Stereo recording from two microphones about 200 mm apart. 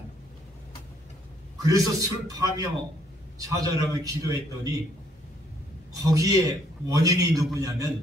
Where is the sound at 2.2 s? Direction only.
15° right (ahead or behind).